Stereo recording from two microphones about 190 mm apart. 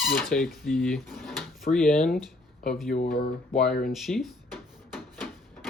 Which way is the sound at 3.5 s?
Centre (ahead or behind).